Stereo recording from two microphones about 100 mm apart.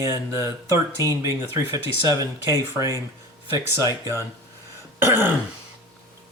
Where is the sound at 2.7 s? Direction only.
35° right (ahead or behind).